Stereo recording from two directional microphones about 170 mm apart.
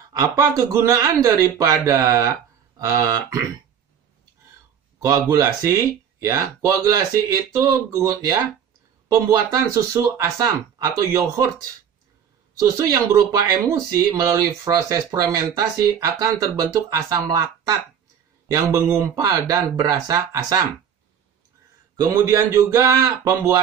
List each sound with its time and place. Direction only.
0.1 s speech: 20° right (ahead or behind)
5.3 s speech: 20° right (ahead or behind)
12.5 s speech: 20° right (ahead or behind)
21.9 s a man's voice: 20° right (ahead or behind)